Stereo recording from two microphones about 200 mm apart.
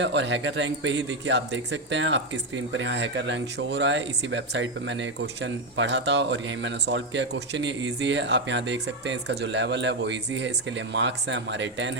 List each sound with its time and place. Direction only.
0.0 s speech: 65° right (ahead or behind)